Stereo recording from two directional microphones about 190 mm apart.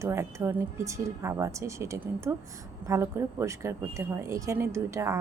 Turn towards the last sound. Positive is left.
turn(degrees=-15)  # may be behind; listen again after turning